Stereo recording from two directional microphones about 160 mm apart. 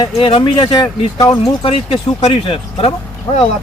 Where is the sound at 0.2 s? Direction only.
35° left (ahead or behind).